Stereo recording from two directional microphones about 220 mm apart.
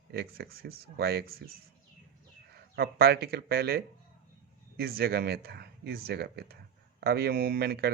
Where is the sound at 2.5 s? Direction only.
45° right (ahead or behind).